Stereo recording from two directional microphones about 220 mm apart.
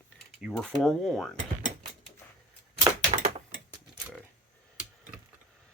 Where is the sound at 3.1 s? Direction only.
35° right (ahead or behind).